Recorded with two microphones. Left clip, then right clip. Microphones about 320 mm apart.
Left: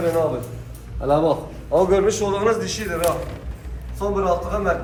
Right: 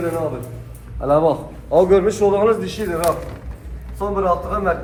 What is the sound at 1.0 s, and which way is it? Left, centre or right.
A man's voice, centre.